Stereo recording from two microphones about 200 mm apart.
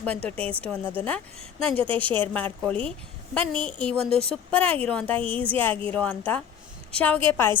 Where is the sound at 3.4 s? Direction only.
25° right (ahead or behind).